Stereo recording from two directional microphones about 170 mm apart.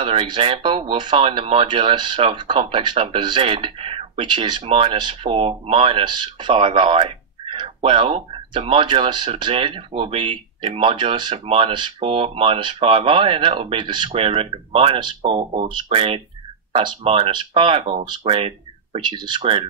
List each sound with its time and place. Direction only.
0.0 s speech: 35° right (ahead or behind)